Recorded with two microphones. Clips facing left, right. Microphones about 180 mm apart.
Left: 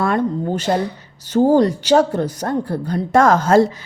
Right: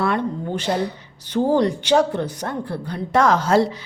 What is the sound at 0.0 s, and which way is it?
Speech, 45° left (ahead or behind).